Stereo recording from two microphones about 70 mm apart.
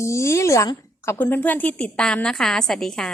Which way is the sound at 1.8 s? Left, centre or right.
Centre.